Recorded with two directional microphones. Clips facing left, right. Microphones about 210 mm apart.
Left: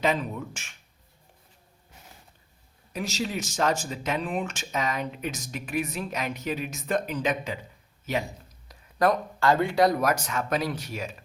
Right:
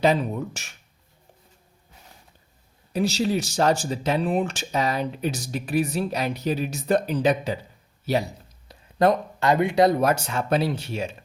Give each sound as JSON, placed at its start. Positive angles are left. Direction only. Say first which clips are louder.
{"t": 0.0, "sound": "speech", "louder": "right 5 dB", "side_deg": -35}
{"t": 2.9, "sound": "speech", "louder": "right 8 dB", "side_deg": -35}